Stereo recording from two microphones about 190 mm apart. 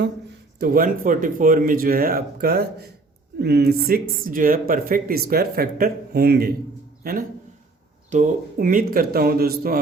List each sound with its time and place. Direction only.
0.6 s a man's voice: 50° right (ahead or behind)